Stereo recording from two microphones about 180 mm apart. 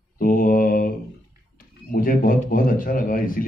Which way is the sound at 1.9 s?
50° left (ahead or behind).